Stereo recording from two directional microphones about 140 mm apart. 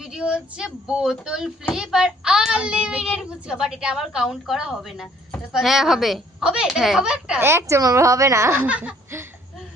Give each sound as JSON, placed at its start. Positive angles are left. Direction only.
{"t": 0.0, "sound": "a child's voice", "side_deg": -5}
{"t": 7.4, "sound": "speech", "side_deg": -20}